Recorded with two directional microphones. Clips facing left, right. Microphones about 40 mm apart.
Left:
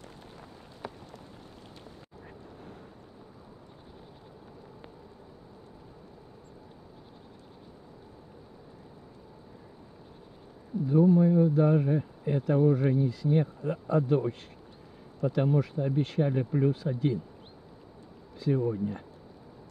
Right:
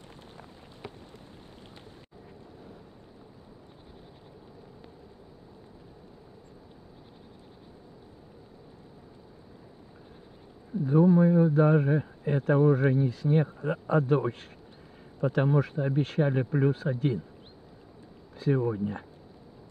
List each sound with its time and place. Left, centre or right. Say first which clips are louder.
10.9 s speech: right 1 dB; right
11.5 s speech: right 2 dB; right
16.7 s speech: even; right
18.7 s speech: right 1 dB; right